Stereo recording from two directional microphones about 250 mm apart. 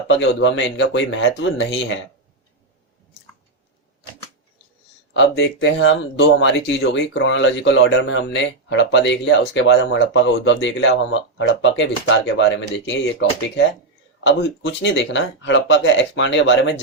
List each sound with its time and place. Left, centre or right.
0.2 s speech: left
5.1 s speech: left
14.3 s speech: left